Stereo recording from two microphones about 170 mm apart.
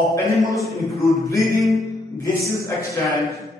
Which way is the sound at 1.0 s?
20° left (ahead or behind).